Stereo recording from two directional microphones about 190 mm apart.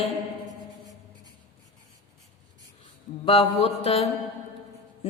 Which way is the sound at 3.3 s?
30° left (ahead or behind).